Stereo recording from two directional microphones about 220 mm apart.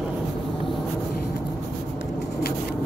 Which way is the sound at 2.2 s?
45° left (ahead or behind).